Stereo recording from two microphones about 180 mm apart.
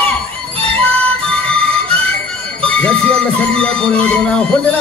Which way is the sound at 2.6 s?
5° left (ahead or behind).